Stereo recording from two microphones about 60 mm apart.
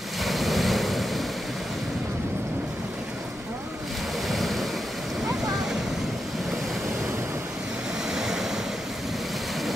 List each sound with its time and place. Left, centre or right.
0.2 s waves: centre
4.3 s waves: centre
8.1 s vehicle: centre